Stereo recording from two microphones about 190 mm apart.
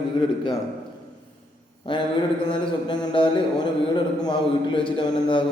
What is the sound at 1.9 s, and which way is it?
A man's voice, 25° left (ahead or behind).